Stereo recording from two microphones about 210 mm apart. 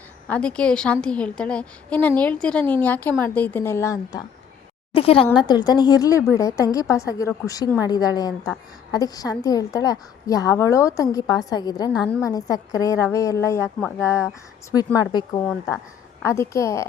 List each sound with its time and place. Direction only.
0.3 s a woman's voice: 5° left (ahead or behind)
4.9 s a woman's voice: 25° left (ahead or behind)